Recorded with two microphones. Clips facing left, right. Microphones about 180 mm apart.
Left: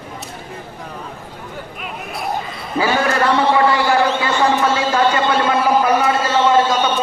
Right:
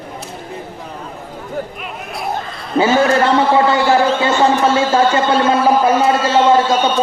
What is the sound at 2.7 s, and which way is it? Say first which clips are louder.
A man's voice: right 5 dB; 25° right (ahead or behind).